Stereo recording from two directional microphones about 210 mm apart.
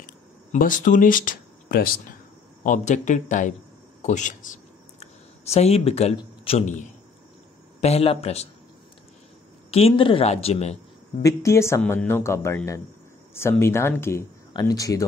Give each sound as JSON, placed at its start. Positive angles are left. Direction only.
{"t": 0.0, "sound": "a sound", "side_deg": 40}
{"t": 2.6, "sound": "a woman's voice", "side_deg": 35}
{"t": 9.7, "sound": "a woman's voice", "side_deg": 30}
{"t": 11.2, "sound": "speech", "side_deg": 15}